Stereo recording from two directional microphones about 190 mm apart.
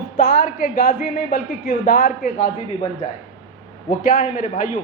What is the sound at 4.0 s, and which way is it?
Speech, 45° left (ahead or behind).